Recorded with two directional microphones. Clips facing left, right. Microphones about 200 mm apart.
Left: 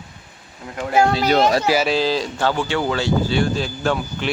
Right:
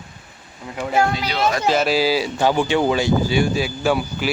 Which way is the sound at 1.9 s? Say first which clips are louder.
Right 1 dB; 10° right (ahead or behind).